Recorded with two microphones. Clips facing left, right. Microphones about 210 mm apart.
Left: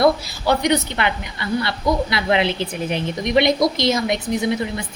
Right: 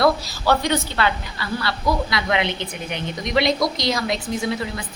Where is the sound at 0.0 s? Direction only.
15° left (ahead or behind).